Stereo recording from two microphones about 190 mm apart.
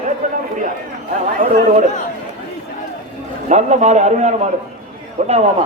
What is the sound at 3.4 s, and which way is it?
A man's voice, 35° right (ahead or behind).